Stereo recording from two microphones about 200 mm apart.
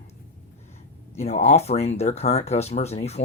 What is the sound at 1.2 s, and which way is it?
Speech, 30° left (ahead or behind).